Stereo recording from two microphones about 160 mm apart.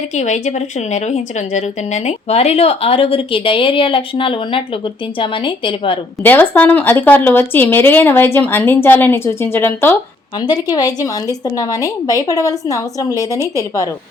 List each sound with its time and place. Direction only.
0.1 s speech: 45° left (ahead or behind)
6.2 s speech: 10° left (ahead or behind)
10.4 s a woman's voice: 25° left (ahead or behind)